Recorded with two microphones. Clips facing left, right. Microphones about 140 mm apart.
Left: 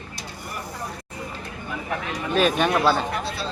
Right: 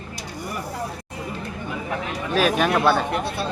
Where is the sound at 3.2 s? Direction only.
55° right (ahead or behind).